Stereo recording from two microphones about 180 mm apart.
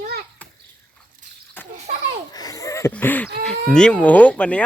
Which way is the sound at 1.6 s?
10° left (ahead or behind).